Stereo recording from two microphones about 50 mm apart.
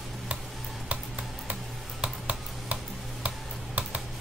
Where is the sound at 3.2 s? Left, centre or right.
Right.